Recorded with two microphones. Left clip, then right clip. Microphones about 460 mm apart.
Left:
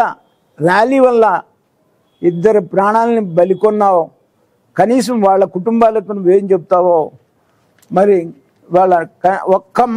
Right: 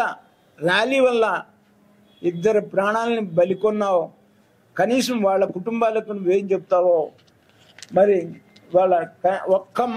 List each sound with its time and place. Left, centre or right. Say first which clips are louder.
0.0 s a man's voice: left 9 dB; left